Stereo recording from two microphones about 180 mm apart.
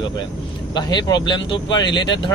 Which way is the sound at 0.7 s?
25° left (ahead or behind).